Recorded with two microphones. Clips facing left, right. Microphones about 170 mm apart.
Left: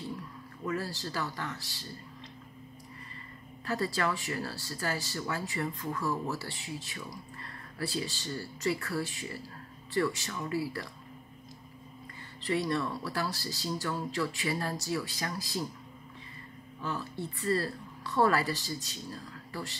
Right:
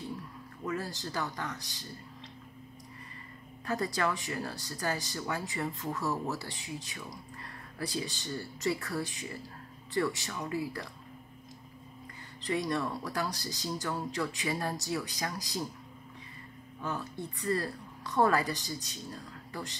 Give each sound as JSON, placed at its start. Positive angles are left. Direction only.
{"t": 0.7, "sound": "speech", "side_deg": -20}
{"t": 3.6, "sound": "speech", "side_deg": -20}
{"t": 12.4, "sound": "speech", "side_deg": -20}
{"t": 16.8, "sound": "speech", "side_deg": -15}